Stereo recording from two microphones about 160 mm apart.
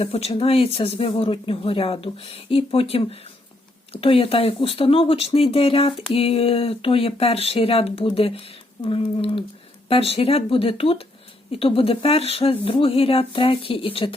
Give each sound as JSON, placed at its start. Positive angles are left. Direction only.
{"t": 0.0, "sound": "speech", "side_deg": 40}